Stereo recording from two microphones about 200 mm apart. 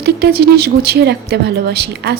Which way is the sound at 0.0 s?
55° right (ahead or behind).